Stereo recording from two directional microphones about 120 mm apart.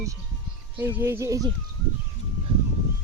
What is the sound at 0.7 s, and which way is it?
Speech, 15° right (ahead or behind).